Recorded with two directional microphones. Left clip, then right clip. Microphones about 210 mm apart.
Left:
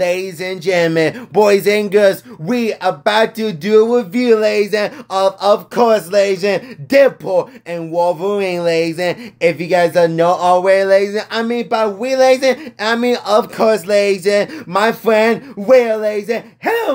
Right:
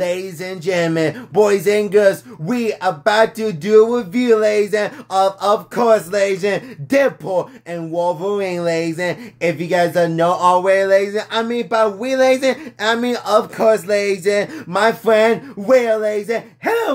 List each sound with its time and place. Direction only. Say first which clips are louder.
0.0 s speech: left 4 dB; 25° left (ahead or behind)